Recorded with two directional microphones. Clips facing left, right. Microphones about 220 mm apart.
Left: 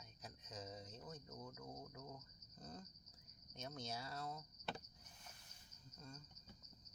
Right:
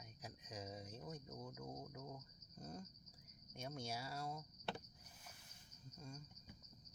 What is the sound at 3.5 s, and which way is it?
Speech, 10° right (ahead or behind).